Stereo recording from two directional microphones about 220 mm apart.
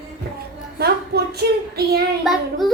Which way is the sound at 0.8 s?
45° right (ahead or behind).